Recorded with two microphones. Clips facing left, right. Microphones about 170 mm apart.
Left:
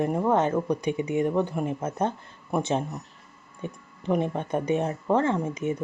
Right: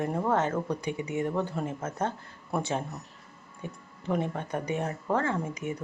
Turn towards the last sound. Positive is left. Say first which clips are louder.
# left 5 dB
turn(degrees=20)  # may be behind; listen again after turning